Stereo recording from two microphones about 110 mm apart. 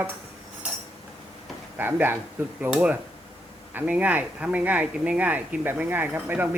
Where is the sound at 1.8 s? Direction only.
20° right (ahead or behind).